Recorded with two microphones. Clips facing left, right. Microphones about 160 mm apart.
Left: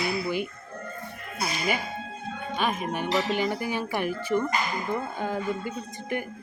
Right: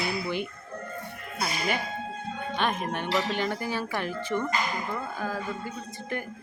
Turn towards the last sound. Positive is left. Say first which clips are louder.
# left 3 dB
turn(degrees=15)  # may be behind; listen again after turning